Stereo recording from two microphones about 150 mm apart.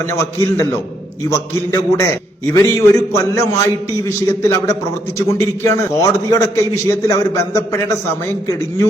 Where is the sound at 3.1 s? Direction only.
20° left (ahead or behind).